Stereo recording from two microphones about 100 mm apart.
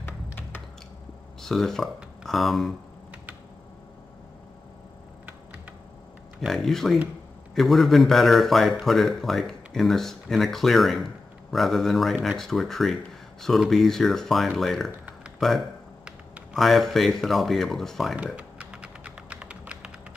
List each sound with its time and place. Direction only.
0.0 s a sound: 20° left (ahead or behind)
1.4 s speech: 5° left (ahead or behind)
6.4 s a man's voice: centre (ahead or behind)
15.3 s a sound: centre (ahead or behind)
16.5 s a man's voice: centre (ahead or behind)
18.1 s typing: 15° right (ahead or behind)